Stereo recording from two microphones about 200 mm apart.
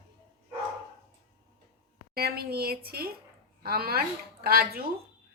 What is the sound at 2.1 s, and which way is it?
A woman's voice, 50° right (ahead or behind).